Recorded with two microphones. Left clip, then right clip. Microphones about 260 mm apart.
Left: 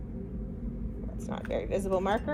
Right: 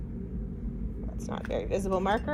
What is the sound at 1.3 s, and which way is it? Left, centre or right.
A woman's voice, right.